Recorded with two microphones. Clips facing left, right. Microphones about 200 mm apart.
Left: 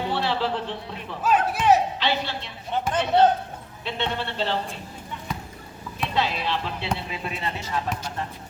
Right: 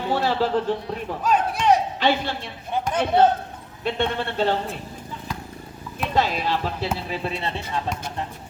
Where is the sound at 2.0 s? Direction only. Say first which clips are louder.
Right 4 dB; 50° right (ahead or behind).